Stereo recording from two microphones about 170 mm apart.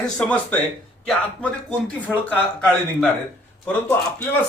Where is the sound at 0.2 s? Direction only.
10° left (ahead or behind).